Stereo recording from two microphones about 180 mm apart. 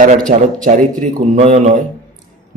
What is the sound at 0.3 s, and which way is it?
Speech, 45° right (ahead or behind).